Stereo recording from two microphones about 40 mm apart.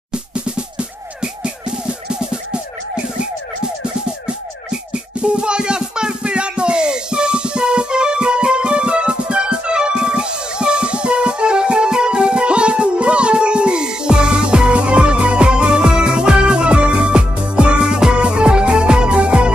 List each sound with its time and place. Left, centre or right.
0.1 s music: right
4.6 s music: right